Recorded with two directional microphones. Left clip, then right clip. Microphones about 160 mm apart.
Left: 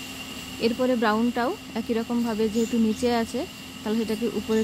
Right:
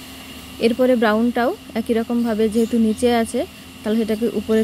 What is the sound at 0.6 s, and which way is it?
Speech, 20° right (ahead or behind).